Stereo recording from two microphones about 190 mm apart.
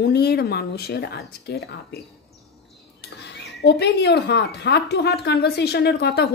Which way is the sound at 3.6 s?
60° left (ahead or behind).